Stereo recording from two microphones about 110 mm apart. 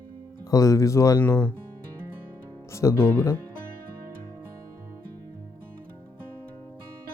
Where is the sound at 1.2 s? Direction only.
15° left (ahead or behind).